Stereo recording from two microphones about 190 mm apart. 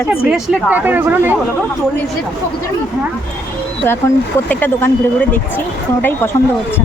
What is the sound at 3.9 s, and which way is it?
Speech, 10° left (ahead or behind).